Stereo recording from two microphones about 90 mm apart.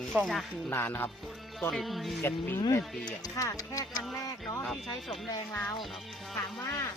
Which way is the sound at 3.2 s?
40° left (ahead or behind).